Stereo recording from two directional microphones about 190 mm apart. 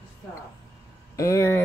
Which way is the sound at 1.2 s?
15° left (ahead or behind).